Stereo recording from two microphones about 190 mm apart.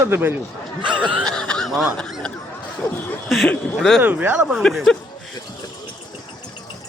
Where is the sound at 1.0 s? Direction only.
5° left (ahead or behind).